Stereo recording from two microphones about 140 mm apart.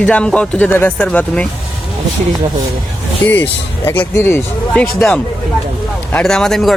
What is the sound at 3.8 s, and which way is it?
Speech, 15° left (ahead or behind).